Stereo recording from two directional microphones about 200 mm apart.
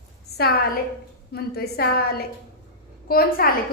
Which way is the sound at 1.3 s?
50° left (ahead or behind).